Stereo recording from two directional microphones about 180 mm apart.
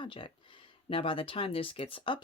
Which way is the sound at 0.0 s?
30° left (ahead or behind).